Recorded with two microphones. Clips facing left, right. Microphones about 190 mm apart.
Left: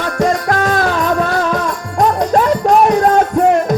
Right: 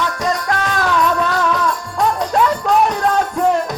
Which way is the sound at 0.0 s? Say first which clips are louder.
Left 5 dB; 50° left (ahead or behind).